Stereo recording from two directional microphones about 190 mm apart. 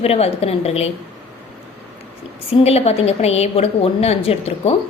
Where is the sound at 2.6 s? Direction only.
35° left (ahead or behind).